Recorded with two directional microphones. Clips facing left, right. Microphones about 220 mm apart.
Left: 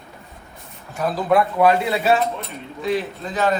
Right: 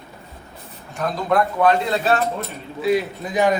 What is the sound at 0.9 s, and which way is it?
A man's voice, 5° left (ahead or behind).